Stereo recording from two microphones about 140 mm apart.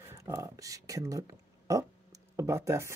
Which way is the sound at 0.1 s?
20° right (ahead or behind).